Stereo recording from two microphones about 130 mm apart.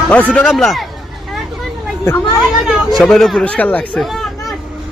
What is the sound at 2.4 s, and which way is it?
Speech, centre (ahead or behind).